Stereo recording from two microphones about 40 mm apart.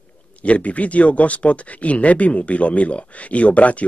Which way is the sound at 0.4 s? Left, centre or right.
Left.